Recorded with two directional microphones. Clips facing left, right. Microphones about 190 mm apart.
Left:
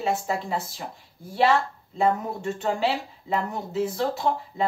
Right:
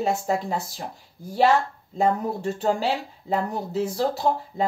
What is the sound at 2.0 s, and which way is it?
Speech, 35° right (ahead or behind).